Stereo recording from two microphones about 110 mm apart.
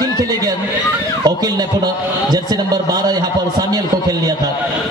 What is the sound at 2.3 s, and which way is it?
A man's voice, 35° right (ahead or behind).